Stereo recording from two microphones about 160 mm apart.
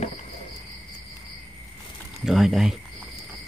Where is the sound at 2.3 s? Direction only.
Centre (ahead or behind).